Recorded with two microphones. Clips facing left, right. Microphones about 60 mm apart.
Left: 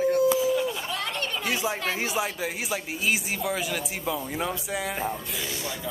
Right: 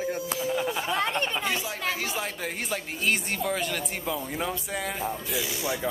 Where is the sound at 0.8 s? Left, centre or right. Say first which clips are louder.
Right 4 dB; right.